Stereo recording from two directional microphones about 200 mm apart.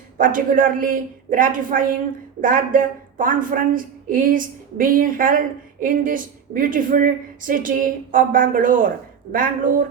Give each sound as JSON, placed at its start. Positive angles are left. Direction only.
{"t": 0.2, "sound": "speech", "side_deg": -45}